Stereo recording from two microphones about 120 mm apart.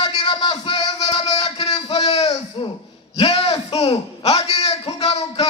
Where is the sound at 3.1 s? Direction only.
60° left (ahead or behind).